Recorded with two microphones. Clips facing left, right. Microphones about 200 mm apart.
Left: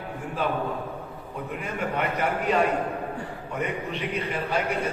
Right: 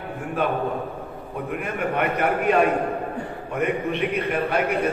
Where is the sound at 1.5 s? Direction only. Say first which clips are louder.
Right 4 dB; 60° right (ahead or behind).